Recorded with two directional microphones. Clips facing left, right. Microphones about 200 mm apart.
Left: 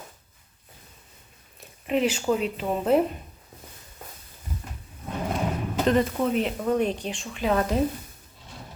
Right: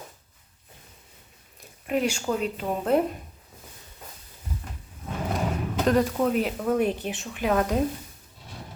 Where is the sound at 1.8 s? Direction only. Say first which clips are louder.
Left 2 dB; centre (ahead or behind).